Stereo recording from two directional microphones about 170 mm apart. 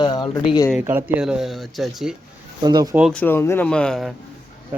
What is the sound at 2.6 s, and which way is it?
Speech, 25° right (ahead or behind).